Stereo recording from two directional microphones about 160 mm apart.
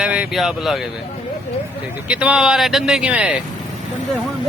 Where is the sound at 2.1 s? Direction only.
5° right (ahead or behind).